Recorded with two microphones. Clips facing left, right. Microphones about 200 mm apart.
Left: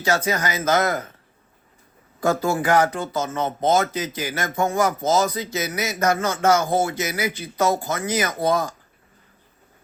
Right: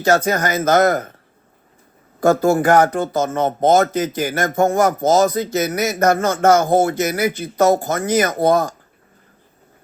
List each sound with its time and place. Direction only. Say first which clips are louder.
0.0 s speech: right 6 dB; 45° right (ahead or behind)
2.2 s speech: right 7 dB; 45° right (ahead or behind)